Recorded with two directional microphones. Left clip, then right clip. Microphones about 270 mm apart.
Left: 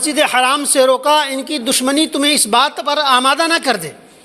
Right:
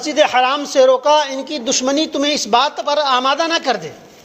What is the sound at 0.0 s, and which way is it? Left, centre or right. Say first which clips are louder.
A man's voice: even; left.